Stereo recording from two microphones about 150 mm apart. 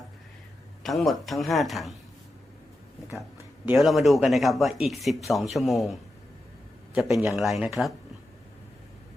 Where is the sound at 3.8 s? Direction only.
Centre (ahead or behind).